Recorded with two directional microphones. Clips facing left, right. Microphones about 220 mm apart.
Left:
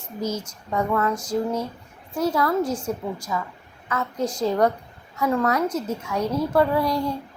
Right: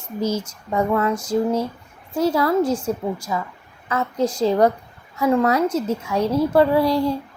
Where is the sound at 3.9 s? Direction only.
30° right (ahead or behind).